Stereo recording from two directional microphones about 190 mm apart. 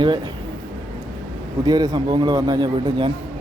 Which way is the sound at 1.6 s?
20° right (ahead or behind).